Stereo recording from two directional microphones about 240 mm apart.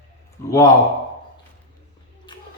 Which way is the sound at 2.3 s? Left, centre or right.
Centre.